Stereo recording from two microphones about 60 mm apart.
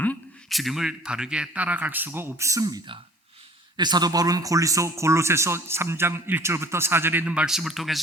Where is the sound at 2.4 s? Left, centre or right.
Right.